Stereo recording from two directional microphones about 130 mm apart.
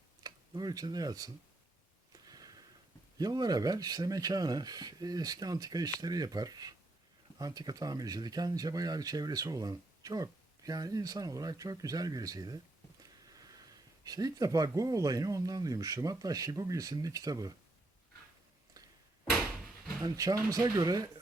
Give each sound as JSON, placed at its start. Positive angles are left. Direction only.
{"t": 0.2, "sound": "speech", "side_deg": -30}
{"t": 2.1, "sound": "a sound", "side_deg": -30}
{"t": 3.2, "sound": "speech", "side_deg": -30}
{"t": 19.2, "sound": "door", "side_deg": -5}
{"t": 20.0, "sound": "speech", "side_deg": -25}